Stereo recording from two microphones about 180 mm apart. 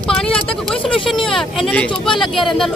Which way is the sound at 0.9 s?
30° left (ahead or behind).